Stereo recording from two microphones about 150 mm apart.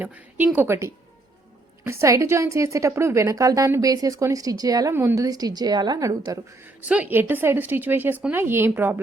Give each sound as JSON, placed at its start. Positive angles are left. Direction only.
{"t": 0.0, "sound": "a woman's voice", "side_deg": -10}
{"t": 6.8, "sound": "a woman's voice", "side_deg": -10}